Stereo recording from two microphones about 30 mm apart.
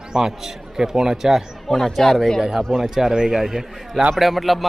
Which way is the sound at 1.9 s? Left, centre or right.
Centre.